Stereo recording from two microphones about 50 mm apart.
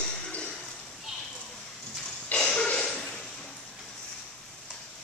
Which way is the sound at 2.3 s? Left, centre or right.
Centre.